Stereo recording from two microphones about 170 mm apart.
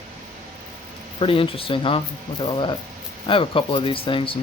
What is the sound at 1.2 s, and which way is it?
Speech, 30° left (ahead or behind).